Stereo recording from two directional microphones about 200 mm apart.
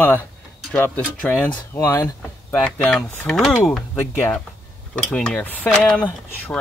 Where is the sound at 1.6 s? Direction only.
15° left (ahead or behind).